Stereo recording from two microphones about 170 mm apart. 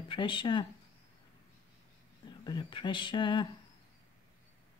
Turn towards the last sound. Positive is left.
turn(degrees=30)  # may be behind; listen again after turning